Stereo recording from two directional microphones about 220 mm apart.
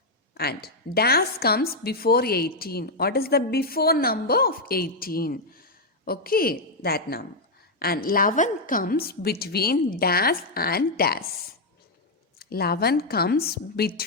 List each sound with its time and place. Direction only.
0.3 s a woman's voice: 45° left (ahead or behind)
12.4 s a woman's voice: 45° left (ahead or behind)